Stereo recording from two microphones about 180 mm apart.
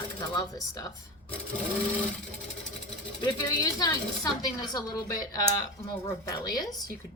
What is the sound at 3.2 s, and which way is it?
A woman's voice, 20° left (ahead or behind).